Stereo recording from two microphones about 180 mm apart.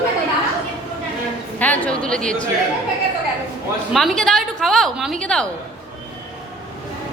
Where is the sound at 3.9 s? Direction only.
Centre (ahead or behind).